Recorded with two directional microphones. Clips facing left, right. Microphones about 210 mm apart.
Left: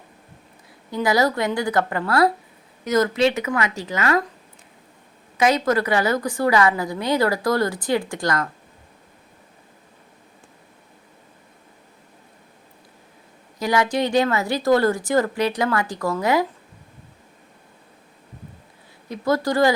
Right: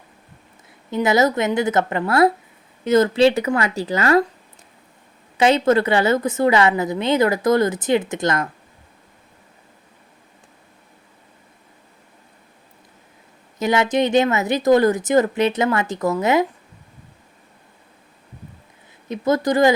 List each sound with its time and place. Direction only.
0.9 s a woman's voice: 20° right (ahead or behind)
5.4 s a woman's voice: 25° right (ahead or behind)
13.6 s a woman's voice: 20° right (ahead or behind)
19.0 s a woman's voice: 20° right (ahead or behind)